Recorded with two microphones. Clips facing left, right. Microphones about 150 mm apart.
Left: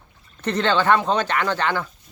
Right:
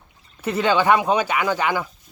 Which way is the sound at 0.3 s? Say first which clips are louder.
Right 1 dB; 10° right (ahead or behind).